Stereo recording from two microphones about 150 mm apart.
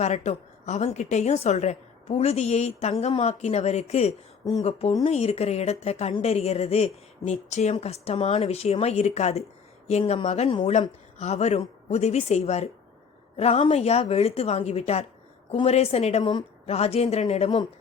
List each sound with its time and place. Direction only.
0.0 s speech: 50° left (ahead or behind)